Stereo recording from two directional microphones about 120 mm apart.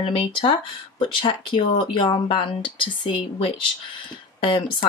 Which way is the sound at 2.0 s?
45° left (ahead or behind).